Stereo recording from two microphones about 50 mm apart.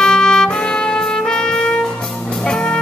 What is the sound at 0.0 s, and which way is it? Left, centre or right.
Music, centre.